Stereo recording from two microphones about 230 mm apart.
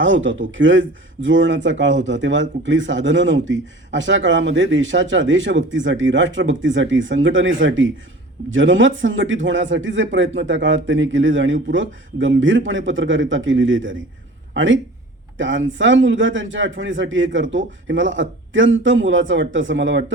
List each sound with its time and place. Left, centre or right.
0.0 s speech: right